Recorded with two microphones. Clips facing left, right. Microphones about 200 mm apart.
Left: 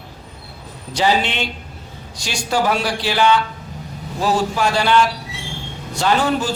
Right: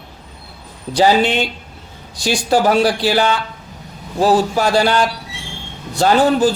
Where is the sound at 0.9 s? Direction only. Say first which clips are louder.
Right 5 dB; 40° right (ahead or behind).